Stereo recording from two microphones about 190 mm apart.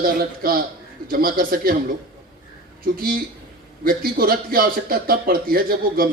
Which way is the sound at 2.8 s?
50° right (ahead or behind).